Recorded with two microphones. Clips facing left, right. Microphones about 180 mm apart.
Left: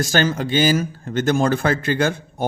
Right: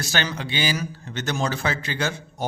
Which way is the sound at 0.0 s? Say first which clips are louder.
Left 8 dB; 45° left (ahead or behind).